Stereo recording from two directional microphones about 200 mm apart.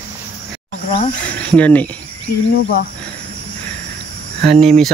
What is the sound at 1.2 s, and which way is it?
Speech, 5° left (ahead or behind).